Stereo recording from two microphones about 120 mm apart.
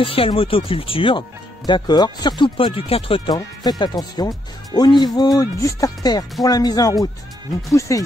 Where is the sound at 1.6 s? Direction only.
35° left (ahead or behind).